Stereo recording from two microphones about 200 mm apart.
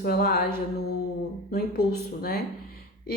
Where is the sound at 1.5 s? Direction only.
50° left (ahead or behind).